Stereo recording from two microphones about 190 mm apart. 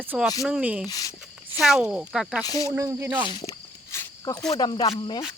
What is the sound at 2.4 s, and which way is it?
Speech, 20° left (ahead or behind).